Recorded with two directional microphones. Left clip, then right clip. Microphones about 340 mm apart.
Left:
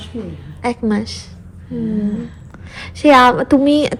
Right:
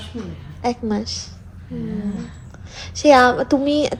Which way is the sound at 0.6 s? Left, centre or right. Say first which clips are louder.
Left 3 dB; left.